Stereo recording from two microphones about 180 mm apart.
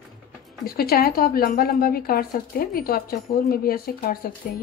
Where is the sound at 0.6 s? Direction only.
55° left (ahead or behind).